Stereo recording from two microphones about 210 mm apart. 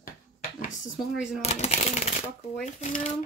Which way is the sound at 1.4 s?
30° left (ahead or behind).